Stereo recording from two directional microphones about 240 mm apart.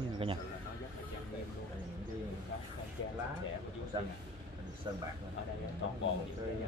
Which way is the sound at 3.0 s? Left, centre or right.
Left.